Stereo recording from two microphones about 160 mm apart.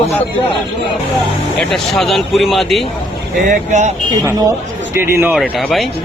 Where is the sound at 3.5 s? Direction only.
50° right (ahead or behind).